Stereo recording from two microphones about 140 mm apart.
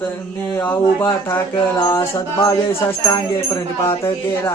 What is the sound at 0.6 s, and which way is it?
Speech, 20° left (ahead or behind).